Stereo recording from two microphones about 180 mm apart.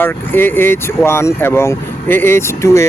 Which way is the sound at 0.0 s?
10° left (ahead or behind).